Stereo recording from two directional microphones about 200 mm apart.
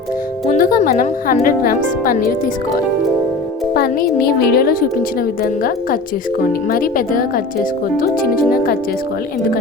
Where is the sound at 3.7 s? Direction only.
50° left (ahead or behind).